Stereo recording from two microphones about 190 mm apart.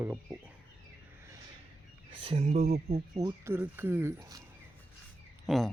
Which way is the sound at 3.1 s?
15° right (ahead or behind).